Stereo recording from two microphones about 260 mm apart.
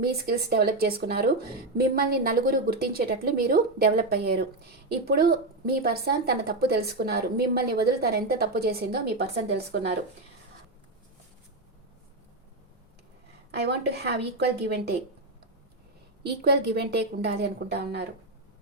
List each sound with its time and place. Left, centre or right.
0.0 s a woman's voice: right
13.5 s a woman's voice: right
16.2 s a woman's voice: right